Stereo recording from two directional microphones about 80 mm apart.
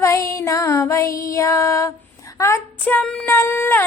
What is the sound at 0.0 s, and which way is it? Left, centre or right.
Music, left.